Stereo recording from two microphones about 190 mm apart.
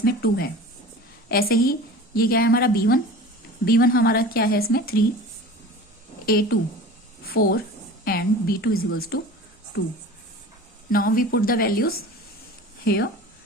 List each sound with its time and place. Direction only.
0.0 s a woman's voice: 55° left (ahead or behind)
6.2 s a woman's voice: 50° left (ahead or behind)
10.9 s a woman's voice: 50° left (ahead or behind)